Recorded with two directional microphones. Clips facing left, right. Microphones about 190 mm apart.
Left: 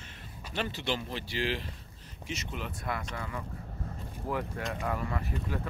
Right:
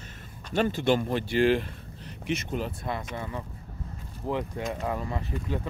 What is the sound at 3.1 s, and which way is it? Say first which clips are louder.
Speech: right 3 dB; 25° right (ahead or behind).